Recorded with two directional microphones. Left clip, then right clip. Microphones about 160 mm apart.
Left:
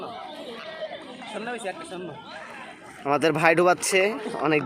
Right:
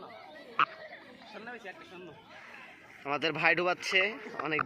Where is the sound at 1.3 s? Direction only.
20° left (ahead or behind).